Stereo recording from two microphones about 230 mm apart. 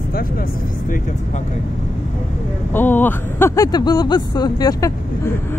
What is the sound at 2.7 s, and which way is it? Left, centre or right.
Speech, centre.